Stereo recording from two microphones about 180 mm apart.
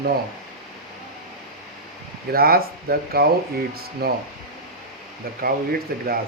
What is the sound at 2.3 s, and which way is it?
Speech, 55° right (ahead or behind).